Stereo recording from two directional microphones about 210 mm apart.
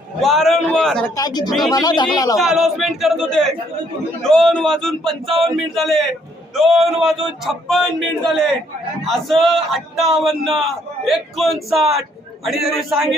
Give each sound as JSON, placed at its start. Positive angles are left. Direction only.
{"t": 0.2, "sound": "a man's voice", "side_deg": 0}
{"t": 1.1, "sound": "speech", "side_deg": 20}
{"t": 1.5, "sound": "speech", "side_deg": 0}
{"t": 1.7, "sound": "speech", "side_deg": 20}
{"t": 2.4, "sound": "speech", "side_deg": 0}